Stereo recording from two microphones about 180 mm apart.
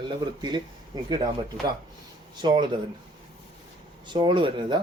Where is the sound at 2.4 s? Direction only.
25° right (ahead or behind).